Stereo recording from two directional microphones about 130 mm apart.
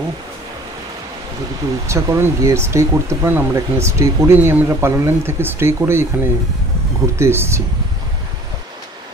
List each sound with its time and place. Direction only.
1.9 s speech: 20° right (ahead or behind)